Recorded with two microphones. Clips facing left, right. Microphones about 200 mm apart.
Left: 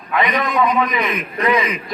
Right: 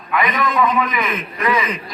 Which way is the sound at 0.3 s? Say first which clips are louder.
Even; centre (ahead or behind).